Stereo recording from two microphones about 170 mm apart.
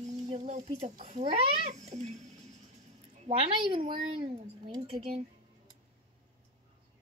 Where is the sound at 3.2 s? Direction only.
30° right (ahead or behind).